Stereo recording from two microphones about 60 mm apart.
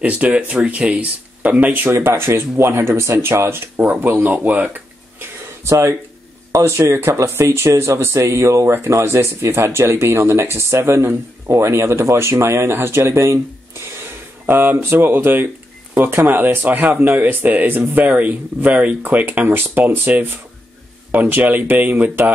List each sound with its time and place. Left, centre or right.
0.0 s speech: right
2.0 s speech: right
5.7 s speech: right
14.4 s speech: right